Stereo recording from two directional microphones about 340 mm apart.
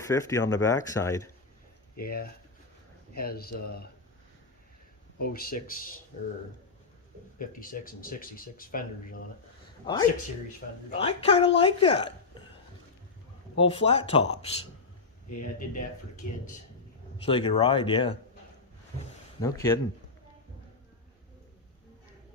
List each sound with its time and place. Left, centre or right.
0.0 s speech: centre
2.0 s speech: left
5.2 s speech: left
7.3 s speech: left
11.0 s speech: centre
13.6 s speech: centre
19.4 s speech: centre